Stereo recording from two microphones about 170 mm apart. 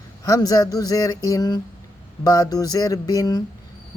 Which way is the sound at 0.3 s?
20° left (ahead or behind).